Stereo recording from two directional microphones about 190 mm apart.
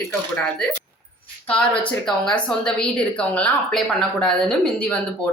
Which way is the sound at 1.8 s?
5° left (ahead or behind).